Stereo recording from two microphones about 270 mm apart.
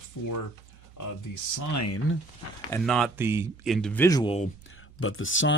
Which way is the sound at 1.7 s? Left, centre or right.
Left.